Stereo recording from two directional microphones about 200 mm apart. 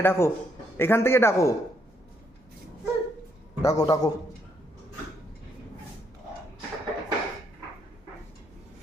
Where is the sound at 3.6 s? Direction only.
20° left (ahead or behind).